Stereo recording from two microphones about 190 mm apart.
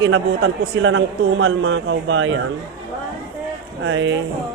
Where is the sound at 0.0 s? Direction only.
90° right.